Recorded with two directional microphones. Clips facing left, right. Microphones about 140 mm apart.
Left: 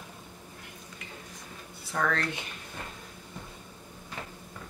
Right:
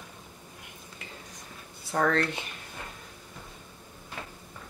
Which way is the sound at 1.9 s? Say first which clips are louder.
Right 4 dB; 40° right (ahead or behind).